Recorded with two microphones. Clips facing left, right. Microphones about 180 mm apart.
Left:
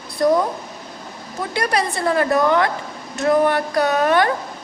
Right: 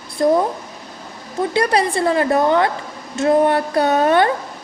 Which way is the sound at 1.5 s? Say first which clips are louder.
Right 3 dB; 30° right (ahead or behind).